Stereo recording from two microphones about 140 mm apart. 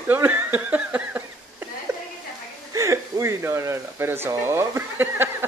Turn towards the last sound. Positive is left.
turn(degrees=-15)  # may be behind; listen again after turning